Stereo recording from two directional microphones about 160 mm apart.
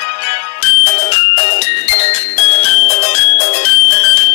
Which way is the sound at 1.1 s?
40° left (ahead or behind).